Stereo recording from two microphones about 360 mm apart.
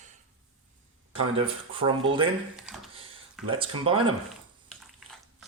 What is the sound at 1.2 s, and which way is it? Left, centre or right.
Speech, centre.